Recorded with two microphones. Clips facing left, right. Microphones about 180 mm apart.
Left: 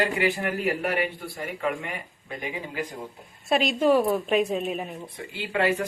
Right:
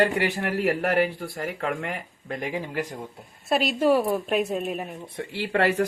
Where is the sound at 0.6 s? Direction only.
90° right.